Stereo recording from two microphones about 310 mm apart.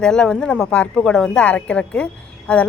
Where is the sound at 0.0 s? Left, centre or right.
Centre.